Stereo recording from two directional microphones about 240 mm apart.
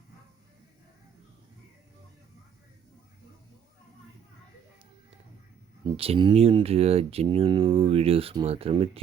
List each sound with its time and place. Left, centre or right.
6.0 s speech: right